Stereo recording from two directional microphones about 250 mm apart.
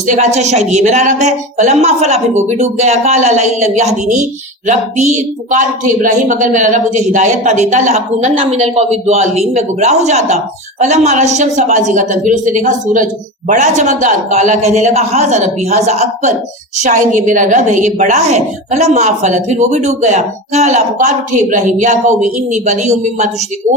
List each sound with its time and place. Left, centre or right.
0.0 s a woman's voice: right